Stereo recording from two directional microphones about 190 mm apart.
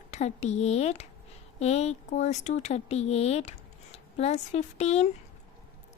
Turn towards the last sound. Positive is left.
turn(degrees=35)  # may be behind; listen again after turning